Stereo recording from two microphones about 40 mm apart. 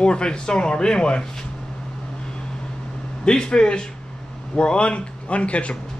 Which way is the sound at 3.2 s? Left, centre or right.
Left.